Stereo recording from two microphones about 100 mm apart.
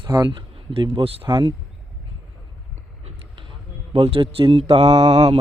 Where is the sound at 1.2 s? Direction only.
50° right (ahead or behind).